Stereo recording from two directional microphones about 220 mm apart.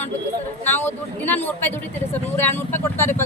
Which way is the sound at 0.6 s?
10° left (ahead or behind).